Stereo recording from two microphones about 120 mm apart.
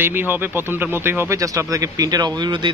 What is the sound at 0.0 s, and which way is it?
Speech, 15° right (ahead or behind).